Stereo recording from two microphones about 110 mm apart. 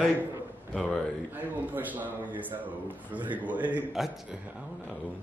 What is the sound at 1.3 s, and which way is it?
A man's voice, 15° right (ahead or behind).